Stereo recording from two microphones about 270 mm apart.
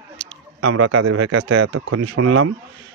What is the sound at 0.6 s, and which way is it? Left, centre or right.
Speech, right.